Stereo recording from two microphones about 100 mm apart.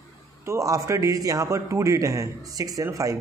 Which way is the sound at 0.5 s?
35° right (ahead or behind).